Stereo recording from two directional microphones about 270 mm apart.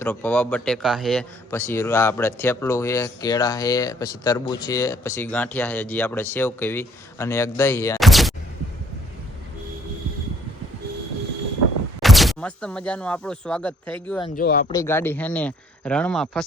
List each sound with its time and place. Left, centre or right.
0.0 s speech: centre
7.9 s a sound: centre
12.0 s speech: centre
14.3 s speech: left
14.7 s speech: centre